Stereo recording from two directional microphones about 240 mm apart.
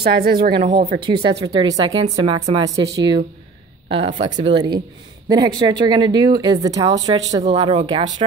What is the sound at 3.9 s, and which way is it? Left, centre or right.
A woman's voice, right.